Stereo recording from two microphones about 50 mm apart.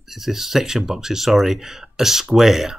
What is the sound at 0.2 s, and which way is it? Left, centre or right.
Speech, centre.